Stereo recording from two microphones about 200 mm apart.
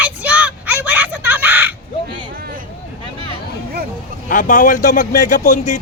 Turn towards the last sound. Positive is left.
turn(degrees=40)  # may be behind; listen again after turning